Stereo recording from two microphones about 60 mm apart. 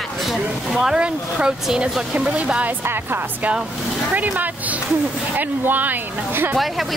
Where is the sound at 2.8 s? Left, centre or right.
Right.